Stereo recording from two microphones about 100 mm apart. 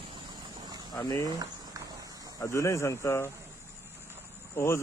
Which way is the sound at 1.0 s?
35° left (ahead or behind).